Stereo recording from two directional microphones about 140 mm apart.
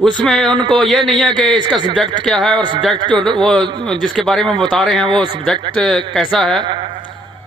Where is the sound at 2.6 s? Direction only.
35° right (ahead or behind).